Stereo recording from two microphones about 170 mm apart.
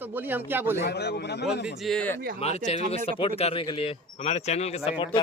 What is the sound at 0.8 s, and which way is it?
Speech, 80° left.